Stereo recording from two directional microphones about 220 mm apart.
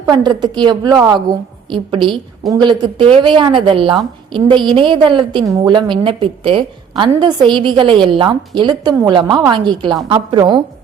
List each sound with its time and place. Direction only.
0.3 s a woman's voice: 20° right (ahead or behind)